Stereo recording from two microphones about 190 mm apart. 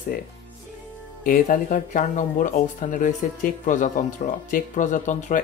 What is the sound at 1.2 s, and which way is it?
Speech, 45° left (ahead or behind).